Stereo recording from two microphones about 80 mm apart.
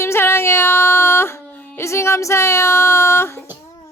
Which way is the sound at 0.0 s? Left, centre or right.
Left.